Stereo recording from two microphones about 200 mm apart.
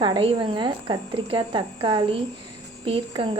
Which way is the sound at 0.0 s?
25° right (ahead or behind).